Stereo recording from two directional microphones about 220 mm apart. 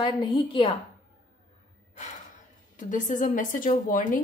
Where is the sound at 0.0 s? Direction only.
20° left (ahead or behind).